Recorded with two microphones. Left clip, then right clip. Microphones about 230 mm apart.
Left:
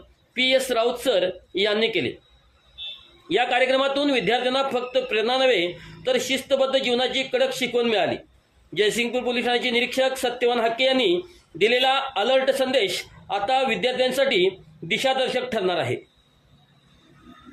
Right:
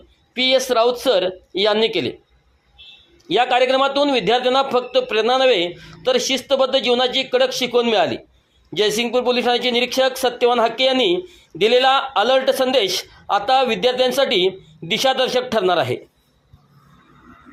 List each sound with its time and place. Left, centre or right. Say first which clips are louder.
0.3 s speech: right 4 dB; centre
3.2 s speech: right 4 dB; centre